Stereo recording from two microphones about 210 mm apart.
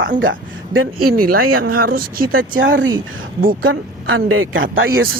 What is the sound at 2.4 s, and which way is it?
Speech, 65° right (ahead or behind).